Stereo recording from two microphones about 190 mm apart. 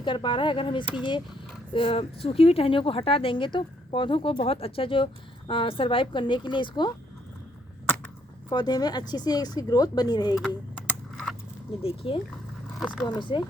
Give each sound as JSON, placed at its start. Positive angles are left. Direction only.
{"t": 0.0, "sound": "speech", "side_deg": 25}
{"t": 8.4, "sound": "speech", "side_deg": 20}
{"t": 11.8, "sound": "speech", "side_deg": 30}